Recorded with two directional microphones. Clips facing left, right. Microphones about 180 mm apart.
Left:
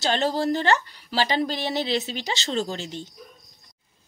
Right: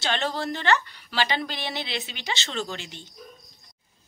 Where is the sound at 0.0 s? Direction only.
40° left (ahead or behind).